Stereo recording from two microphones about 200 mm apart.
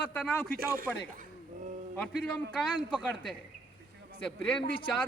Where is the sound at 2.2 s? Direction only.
5° left (ahead or behind).